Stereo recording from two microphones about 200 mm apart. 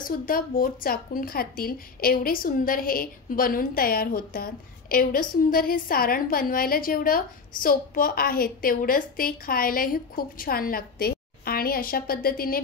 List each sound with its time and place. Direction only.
0.0 s a woman's voice: 45° left (ahead or behind)